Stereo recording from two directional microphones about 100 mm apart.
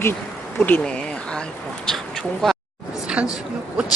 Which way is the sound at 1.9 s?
5° left (ahead or behind).